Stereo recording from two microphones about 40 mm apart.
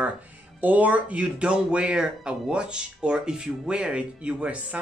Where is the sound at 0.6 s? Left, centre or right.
Right.